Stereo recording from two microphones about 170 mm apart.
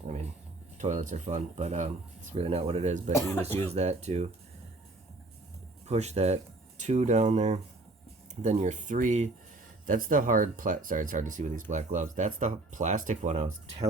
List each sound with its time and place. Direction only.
0.8 s speech: 45° right (ahead or behind)
5.8 s speech: 40° right (ahead or behind)